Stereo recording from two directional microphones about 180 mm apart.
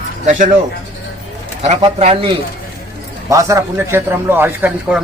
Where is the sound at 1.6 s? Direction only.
40° right (ahead or behind).